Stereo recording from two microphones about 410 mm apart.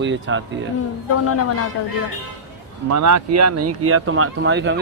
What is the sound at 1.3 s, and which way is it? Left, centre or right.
Speech, left.